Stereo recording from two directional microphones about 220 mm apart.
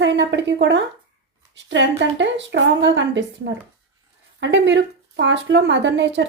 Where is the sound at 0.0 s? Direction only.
55° right (ahead or behind).